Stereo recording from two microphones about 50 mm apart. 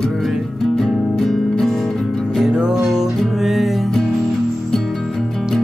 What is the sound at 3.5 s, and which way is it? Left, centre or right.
Music, centre.